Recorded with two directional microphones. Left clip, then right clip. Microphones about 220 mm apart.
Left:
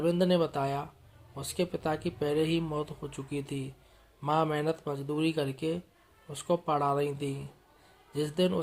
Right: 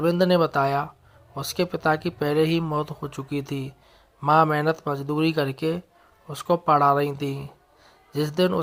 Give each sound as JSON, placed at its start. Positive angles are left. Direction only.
{"t": 0.0, "sound": "speech", "side_deg": -20}